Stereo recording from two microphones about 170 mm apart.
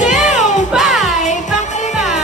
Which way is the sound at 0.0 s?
45° left (ahead or behind).